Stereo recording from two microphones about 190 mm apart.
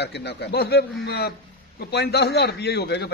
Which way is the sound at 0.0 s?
60° left (ahead or behind).